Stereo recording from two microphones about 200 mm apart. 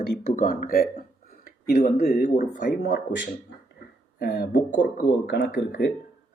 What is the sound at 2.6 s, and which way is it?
Speech, 55° left (ahead or behind).